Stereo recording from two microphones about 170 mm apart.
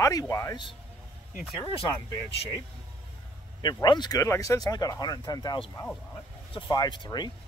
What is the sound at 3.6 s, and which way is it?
Speech, 25° left (ahead or behind).